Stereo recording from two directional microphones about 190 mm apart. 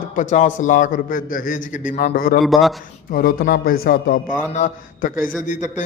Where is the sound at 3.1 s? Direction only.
50° left (ahead or behind).